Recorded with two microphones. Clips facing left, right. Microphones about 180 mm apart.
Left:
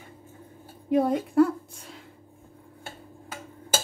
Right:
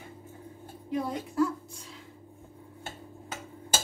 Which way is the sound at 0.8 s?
60° left (ahead or behind).